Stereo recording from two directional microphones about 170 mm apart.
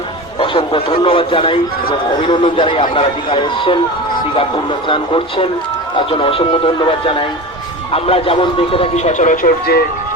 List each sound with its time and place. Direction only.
0.3 s a man's voice: 30° left (ahead or behind); by 9.8 s 60° left (ahead or behind)